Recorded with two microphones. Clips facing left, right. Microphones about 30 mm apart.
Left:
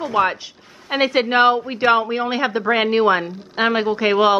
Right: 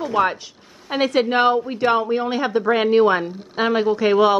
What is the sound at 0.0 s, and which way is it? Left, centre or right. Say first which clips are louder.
A woman's voice: left 1 dB; centre.